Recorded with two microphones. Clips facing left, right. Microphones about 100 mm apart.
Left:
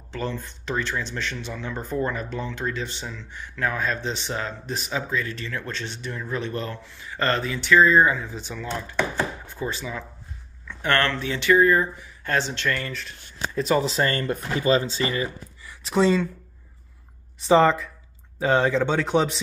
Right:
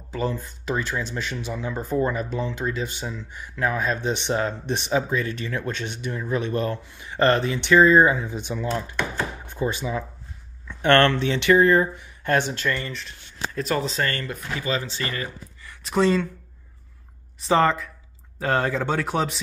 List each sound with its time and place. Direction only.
0.1 s speech: 10° right (ahead or behind)
13.6 s speech: 5° left (ahead or behind)
13.9 s speech: 25° left (ahead or behind)
15.7 s speech: centre (ahead or behind)
17.4 s speech: centre (ahead or behind)